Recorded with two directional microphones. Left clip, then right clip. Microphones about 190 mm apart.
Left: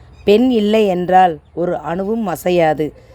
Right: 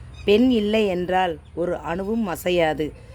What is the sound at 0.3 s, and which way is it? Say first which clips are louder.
Speech: left 6 dB; 30° left (ahead or behind).